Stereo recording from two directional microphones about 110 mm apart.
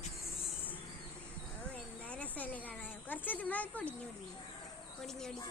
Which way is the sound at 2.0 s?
10° left (ahead or behind).